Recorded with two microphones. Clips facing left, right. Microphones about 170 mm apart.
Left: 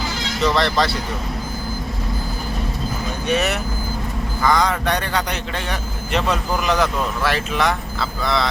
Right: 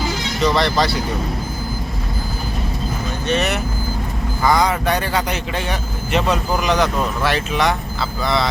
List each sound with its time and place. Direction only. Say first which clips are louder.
0.4 s speech: right 1 dB; centre (ahead or behind)
3.2 s speech: right 1 dB; 5° left (ahead or behind)
4.4 s speech: right 2 dB; 10° right (ahead or behind)